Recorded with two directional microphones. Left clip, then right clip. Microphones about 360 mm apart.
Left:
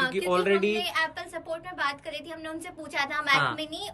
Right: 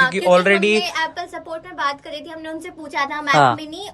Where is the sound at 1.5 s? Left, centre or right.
Centre.